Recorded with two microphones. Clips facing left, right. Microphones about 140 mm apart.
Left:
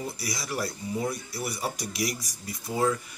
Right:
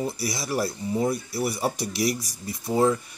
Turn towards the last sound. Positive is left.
turn(degrees=-25)  # may be behind; listen again after turning